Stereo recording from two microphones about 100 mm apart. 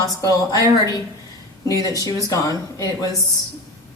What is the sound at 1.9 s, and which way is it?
Speech, 35° left (ahead or behind).